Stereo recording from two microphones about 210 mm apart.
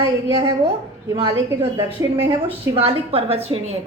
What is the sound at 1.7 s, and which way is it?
Speech, 15° right (ahead or behind).